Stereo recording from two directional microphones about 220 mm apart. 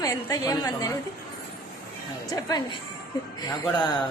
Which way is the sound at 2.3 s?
15° left (ahead or behind).